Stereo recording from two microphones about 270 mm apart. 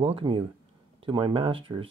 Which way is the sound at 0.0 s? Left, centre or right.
Centre.